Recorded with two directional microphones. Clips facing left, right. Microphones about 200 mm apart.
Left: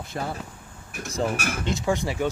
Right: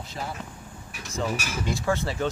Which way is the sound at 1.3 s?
55° left (ahead or behind).